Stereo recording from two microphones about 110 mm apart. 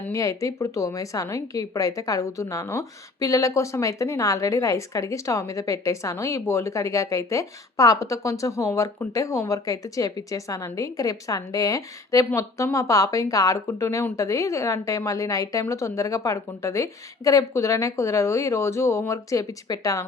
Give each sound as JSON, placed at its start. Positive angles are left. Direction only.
{"t": 0.1, "sound": "a woman's voice", "side_deg": 30}